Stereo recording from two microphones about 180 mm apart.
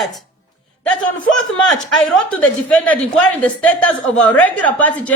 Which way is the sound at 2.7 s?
10° left (ahead or behind).